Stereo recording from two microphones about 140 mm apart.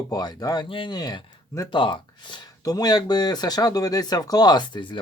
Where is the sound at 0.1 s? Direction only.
30° left (ahead or behind).